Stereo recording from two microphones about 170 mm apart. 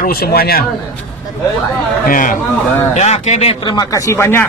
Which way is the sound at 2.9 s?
40° left (ahead or behind).